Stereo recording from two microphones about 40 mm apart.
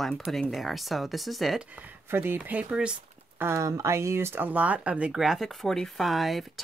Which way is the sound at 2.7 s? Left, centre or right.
Right.